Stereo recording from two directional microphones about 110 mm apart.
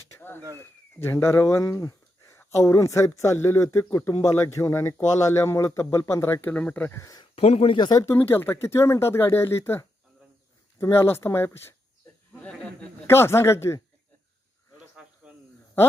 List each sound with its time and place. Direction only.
0.2 s speech: 20° left (ahead or behind)
7.3 s speech: 70° left (ahead or behind)
7.8 s speech: 40° left (ahead or behind)
8.0 s speech: 20° left (ahead or behind)
14.8 s cricket: 10° right (ahead or behind)